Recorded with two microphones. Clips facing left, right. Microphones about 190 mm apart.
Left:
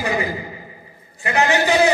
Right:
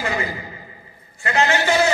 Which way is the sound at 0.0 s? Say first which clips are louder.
Left 3 dB; 15° left (ahead or behind).